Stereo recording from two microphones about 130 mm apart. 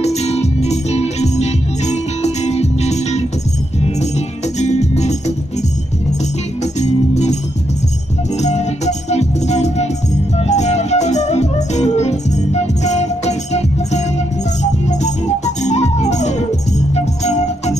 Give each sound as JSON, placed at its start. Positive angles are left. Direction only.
{"t": 0.0, "sound": "music", "side_deg": 55}
{"t": 4.6, "sound": "music", "side_deg": 60}
{"t": 6.6, "sound": "music", "side_deg": 60}
{"t": 8.4, "sound": "music", "side_deg": 60}